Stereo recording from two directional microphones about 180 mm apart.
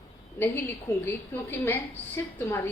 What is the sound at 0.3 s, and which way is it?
A woman's voice, 15° left (ahead or behind).